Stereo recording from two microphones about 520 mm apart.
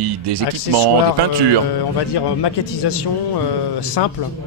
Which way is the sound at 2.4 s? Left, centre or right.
Left.